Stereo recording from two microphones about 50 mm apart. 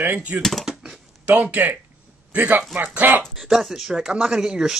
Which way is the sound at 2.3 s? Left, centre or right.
Right.